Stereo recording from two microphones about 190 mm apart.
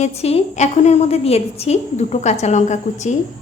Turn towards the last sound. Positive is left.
turn(degrees=40)  # may be behind; listen again after turning